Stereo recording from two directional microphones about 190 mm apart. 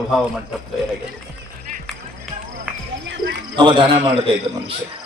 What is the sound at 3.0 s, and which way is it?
Cricket, 65° right (ahead or behind).